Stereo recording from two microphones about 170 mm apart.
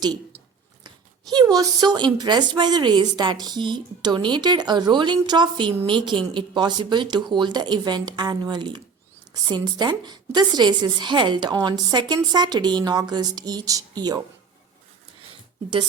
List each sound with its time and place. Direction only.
0.9 s speech: 25° right (ahead or behind)